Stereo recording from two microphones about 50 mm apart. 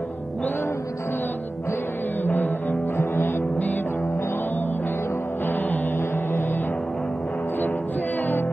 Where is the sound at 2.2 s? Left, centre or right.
Left.